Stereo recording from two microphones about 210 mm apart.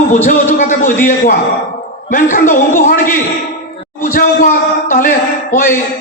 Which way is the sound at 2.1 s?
40° left (ahead or behind).